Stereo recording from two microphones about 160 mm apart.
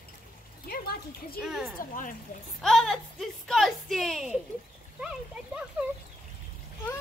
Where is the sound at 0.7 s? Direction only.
70° left (ahead or behind).